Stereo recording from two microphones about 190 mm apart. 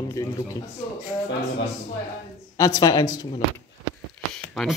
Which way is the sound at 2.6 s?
20° left (ahead or behind).